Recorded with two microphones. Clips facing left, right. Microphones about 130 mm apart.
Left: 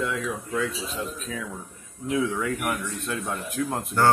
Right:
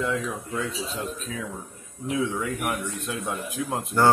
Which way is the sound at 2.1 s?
25° right (ahead or behind).